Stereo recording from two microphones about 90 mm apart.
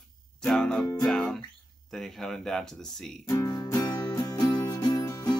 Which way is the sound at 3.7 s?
45° left (ahead or behind).